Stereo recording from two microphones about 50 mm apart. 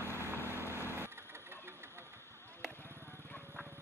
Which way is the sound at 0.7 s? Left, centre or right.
Left.